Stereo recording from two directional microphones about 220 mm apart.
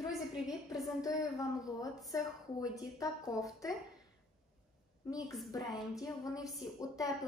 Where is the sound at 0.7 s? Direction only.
15° left (ahead or behind).